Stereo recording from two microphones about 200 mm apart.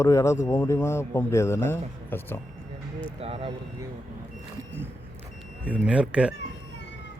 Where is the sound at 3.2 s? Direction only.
30° right (ahead or behind).